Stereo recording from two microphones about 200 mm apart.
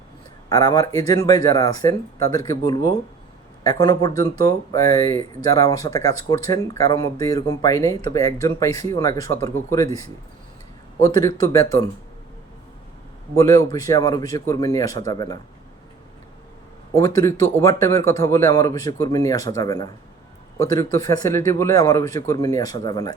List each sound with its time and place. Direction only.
0.5 s speech: 20° left (ahead or behind)
11.0 s speech: 15° left (ahead or behind)
13.3 s speech: 15° left (ahead or behind)
17.2 s speech: 15° left (ahead or behind)